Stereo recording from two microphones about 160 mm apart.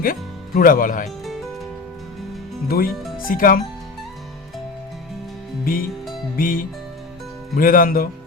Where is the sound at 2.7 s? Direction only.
65° left (ahead or behind).